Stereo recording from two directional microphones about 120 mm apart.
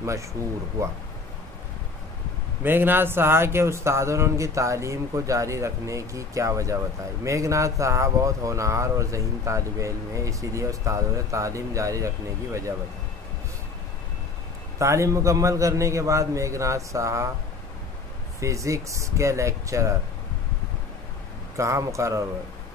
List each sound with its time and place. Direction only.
0.0 s speech: 25° right (ahead or behind)
2.6 s speech: 15° right (ahead or behind)
14.8 s speech: 25° right (ahead or behind)
18.4 s speech: 25° right (ahead or behind)
21.5 s speech: 25° right (ahead or behind)